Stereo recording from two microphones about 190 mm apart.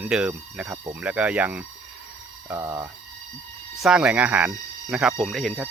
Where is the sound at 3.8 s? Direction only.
5° right (ahead or behind).